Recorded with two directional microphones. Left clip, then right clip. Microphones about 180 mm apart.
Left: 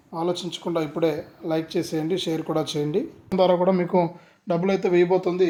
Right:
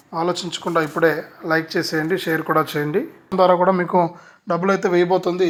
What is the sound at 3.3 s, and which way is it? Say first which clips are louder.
Speech: right 5 dB; centre (ahead or behind).